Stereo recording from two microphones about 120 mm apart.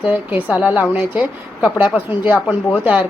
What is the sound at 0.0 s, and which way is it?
A woman's voice, 15° right (ahead or behind).